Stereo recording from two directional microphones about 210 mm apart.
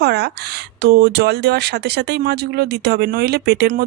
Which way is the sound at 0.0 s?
50° right (ahead or behind).